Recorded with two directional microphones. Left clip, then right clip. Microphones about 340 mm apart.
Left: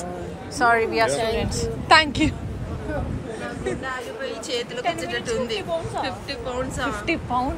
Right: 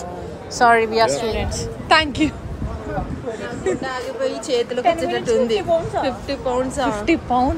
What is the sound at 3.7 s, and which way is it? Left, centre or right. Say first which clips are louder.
A woman's voice: right 7 dB; centre.